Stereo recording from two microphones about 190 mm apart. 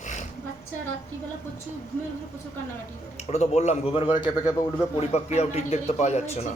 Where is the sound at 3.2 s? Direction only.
35° left (ahead or behind).